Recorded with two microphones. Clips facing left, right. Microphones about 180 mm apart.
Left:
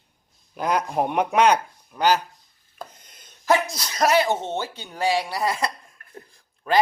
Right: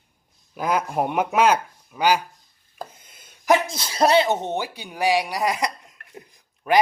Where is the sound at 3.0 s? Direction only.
5° right (ahead or behind).